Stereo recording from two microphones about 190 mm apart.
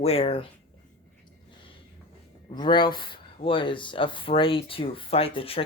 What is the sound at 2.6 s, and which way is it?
Speech, 25° left (ahead or behind).